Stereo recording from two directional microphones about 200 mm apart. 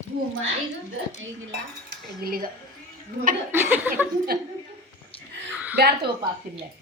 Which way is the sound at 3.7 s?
10° right (ahead or behind).